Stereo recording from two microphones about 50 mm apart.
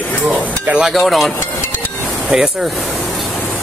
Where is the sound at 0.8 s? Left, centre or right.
Centre.